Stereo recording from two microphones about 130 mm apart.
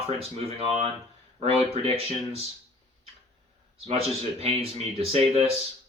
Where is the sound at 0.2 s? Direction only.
50° right (ahead or behind).